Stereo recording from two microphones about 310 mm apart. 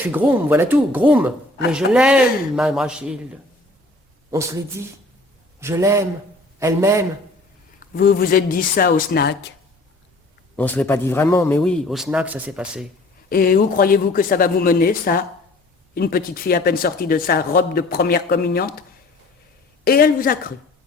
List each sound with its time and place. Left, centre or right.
0.0 s a man's voice: centre
4.3 s speech: centre
7.9 s speech: left
10.6 s a man's voice: centre
13.3 s speech: left